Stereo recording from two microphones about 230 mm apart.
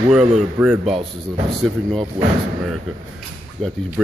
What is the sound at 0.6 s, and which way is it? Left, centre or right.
Speech, centre.